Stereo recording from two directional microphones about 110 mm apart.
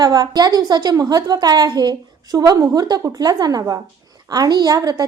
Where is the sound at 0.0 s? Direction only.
40° right (ahead or behind).